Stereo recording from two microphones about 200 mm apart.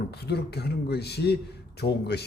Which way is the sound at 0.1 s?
55° left (ahead or behind).